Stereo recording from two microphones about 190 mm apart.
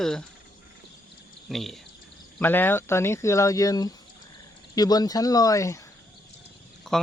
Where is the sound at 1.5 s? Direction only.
Centre (ahead or behind); by 5.8 s 15° left (ahead or behind).